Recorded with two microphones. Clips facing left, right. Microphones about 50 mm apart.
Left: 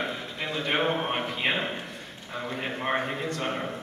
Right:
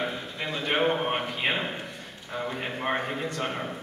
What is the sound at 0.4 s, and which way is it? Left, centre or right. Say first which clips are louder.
Speech: right 1 dB; centre.